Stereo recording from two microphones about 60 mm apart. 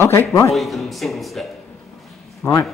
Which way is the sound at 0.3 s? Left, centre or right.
Left.